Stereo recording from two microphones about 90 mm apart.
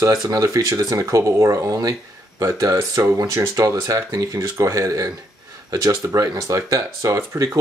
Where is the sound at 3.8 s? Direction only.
40° right (ahead or behind).